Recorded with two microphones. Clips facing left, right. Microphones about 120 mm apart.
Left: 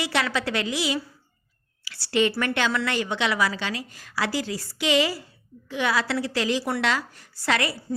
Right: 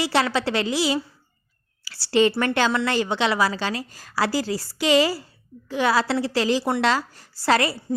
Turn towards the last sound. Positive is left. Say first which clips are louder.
# right 5 dB
turn(degrees=-35)  # may be behind; listen again after turning